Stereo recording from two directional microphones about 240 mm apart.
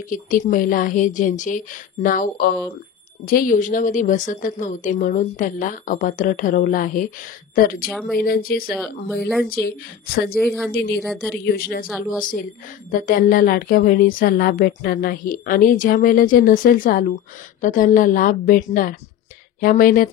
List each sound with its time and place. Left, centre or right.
0.1 s a woman's voice: left
7.9 s speech: centre
8.2 s a woman's voice: left
8.7 s speech: centre
9.7 s a woman's voice: left
10.3 s speech: centre
10.7 s a woman's voice: left
11.0 s speech: centre
11.4 s a woman's voice: left
11.9 s speech: centre
12.9 s a woman's voice: left